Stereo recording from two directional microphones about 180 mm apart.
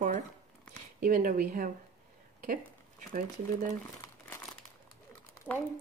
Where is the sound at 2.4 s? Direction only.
45° right (ahead or behind).